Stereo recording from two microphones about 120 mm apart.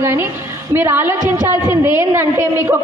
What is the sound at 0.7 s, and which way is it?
A man's voice, 20° right (ahead or behind).